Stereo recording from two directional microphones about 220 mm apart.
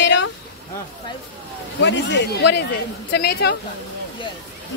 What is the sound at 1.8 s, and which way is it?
Speech, 55° left (ahead or behind).